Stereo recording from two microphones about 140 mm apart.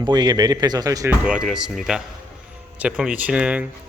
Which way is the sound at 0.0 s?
30° right (ahead or behind).